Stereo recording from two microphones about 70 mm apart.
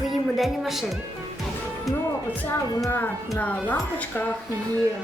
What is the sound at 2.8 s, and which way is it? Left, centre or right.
Speech, left.